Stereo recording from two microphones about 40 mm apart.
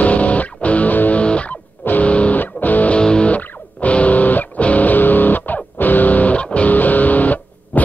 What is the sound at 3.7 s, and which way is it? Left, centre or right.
Music, left.